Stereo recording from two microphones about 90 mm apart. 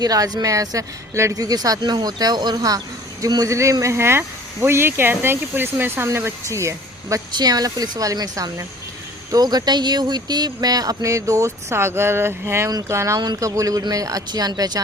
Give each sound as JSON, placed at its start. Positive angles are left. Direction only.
{"t": 0.0, "sound": "speech", "side_deg": -45}
{"t": 7.3, "sound": "speech", "side_deg": -45}